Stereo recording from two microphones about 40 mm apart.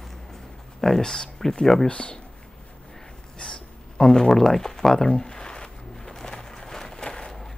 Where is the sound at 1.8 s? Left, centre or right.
Left.